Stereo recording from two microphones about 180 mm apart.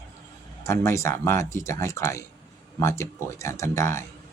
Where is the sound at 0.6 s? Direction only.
15° left (ahead or behind).